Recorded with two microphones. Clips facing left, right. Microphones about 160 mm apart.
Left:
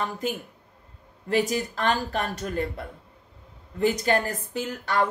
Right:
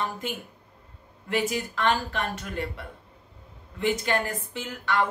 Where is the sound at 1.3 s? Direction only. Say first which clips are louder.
Left 3 dB; 40° left (ahead or behind).